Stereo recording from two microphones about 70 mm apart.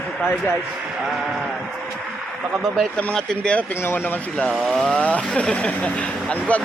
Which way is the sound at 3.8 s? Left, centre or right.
Left.